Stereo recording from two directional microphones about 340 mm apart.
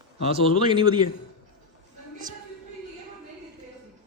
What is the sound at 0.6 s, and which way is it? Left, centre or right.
Speech, centre.